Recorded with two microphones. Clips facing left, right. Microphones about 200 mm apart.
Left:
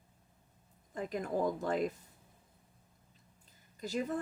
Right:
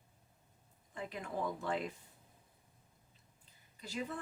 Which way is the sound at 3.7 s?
40° left (ahead or behind).